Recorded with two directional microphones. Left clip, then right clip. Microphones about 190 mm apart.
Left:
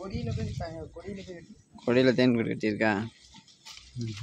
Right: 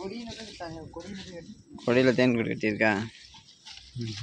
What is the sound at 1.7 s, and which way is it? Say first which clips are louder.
Speech: right 1 dB; 10° left (ahead or behind).